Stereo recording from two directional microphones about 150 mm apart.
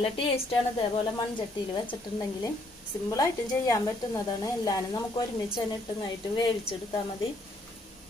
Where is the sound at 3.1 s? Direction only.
20° left (ahead or behind).